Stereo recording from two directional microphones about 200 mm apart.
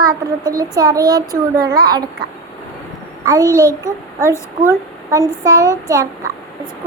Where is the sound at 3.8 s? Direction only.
15° right (ahead or behind).